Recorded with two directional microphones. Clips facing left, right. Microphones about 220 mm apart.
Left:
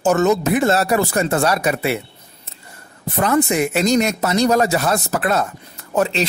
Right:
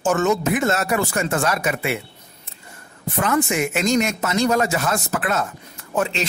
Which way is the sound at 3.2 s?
35° left (ahead or behind).